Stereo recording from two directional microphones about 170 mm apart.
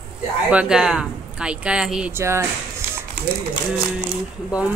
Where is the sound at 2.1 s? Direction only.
15° right (ahead or behind).